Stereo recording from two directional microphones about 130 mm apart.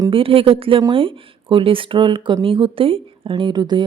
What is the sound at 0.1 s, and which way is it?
Speech, 45° right (ahead or behind).